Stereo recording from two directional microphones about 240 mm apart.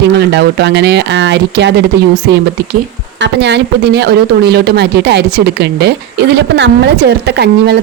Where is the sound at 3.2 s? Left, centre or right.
Right.